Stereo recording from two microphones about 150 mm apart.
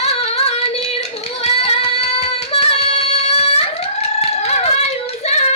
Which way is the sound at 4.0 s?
45° left (ahead or behind).